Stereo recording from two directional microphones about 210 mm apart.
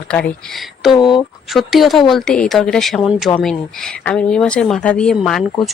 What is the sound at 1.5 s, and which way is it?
Speech, centre (ahead or behind).